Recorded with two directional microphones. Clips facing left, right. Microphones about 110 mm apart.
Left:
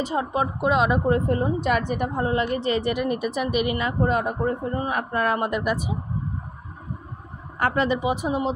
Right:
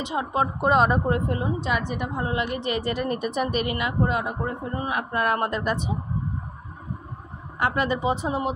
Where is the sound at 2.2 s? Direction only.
35° left (ahead or behind).